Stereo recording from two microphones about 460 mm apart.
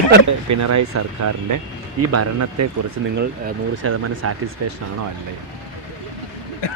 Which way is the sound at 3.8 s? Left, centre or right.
Right.